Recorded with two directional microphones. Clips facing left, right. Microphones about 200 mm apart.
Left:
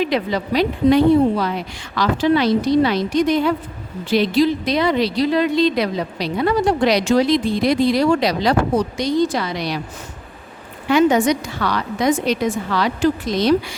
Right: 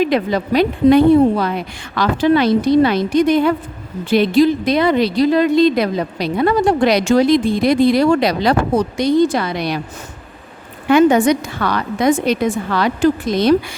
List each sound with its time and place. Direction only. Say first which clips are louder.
0.0 s a woman's voice: right 4 dB; 50° right (ahead or behind)
10.8 s a woman's voice: right 3 dB; 55° right (ahead or behind)